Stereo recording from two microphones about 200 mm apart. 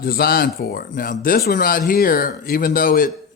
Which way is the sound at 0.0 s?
50° left (ahead or behind).